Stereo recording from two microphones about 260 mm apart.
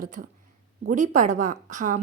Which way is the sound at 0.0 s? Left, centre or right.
Right.